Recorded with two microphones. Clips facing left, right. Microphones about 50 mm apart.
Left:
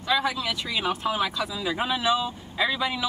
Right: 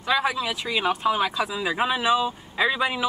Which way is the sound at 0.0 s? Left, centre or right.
Right.